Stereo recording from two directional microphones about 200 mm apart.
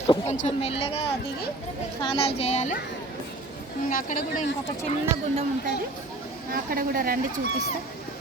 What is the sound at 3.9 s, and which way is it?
Speech, 45° left (ahead or behind).